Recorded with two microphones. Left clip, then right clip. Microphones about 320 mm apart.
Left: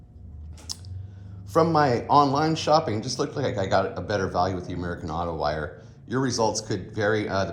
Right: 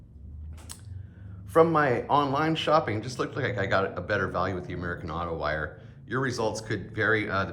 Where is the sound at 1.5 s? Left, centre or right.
Centre.